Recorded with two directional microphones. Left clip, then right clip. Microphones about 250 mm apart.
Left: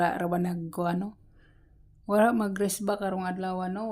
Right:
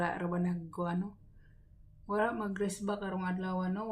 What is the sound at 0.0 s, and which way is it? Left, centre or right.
Speech, left.